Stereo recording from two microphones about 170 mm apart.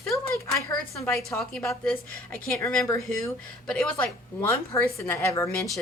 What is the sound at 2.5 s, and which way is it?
Speech, 15° left (ahead or behind).